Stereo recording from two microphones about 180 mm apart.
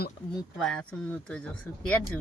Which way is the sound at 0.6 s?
5° left (ahead or behind).